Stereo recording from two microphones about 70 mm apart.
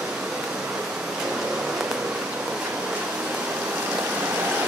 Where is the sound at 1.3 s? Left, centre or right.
Centre.